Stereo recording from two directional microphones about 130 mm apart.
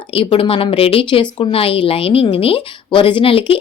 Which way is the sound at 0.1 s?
45° left (ahead or behind).